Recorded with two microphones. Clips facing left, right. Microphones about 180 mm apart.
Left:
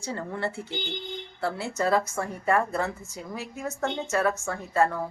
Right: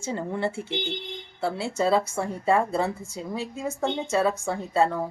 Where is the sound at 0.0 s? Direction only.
20° right (ahead or behind).